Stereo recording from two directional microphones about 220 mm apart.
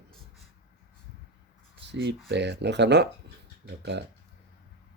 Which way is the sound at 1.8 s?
50° right (ahead or behind).